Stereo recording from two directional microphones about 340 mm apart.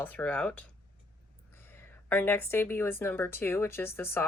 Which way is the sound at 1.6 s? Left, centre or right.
Centre.